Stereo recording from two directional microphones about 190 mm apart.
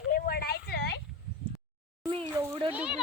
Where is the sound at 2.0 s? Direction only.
25° right (ahead or behind).